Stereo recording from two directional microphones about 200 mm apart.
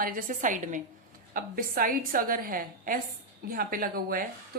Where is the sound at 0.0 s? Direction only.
45° right (ahead or behind).